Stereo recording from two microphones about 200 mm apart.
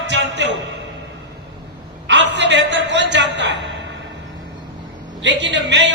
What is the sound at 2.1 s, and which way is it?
Music, 60° right (ahead or behind).